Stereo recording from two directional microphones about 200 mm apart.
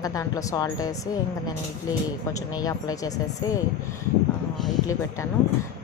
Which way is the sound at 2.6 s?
20° left (ahead or behind).